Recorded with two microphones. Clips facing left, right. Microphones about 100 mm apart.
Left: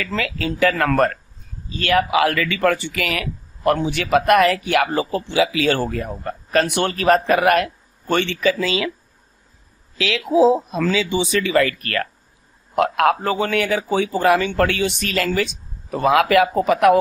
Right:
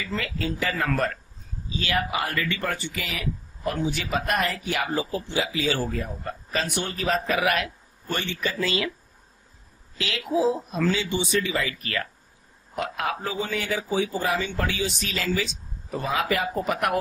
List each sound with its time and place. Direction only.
0.0 s speech: 80° left; by 7.7 s 55° left (ahead or behind)
8.1 s speech: 85° left
9.9 s a woman's voice: 90° left; by 16.4 s 75° left (ahead or behind)